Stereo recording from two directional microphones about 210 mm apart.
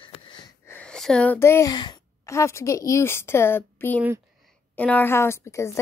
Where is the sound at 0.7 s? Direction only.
5° left (ahead or behind).